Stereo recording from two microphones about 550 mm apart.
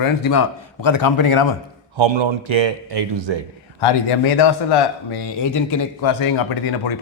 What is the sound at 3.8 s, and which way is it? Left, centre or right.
Speech, left.